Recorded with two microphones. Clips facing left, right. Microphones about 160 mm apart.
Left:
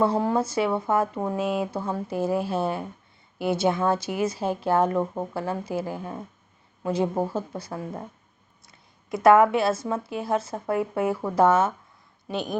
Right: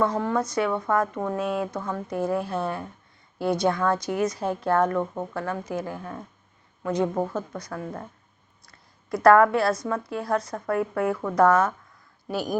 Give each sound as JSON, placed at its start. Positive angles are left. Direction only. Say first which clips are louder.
{"t": 0.0, "sound": "a woman's voice", "louder": "left 2 dB", "side_deg": 30}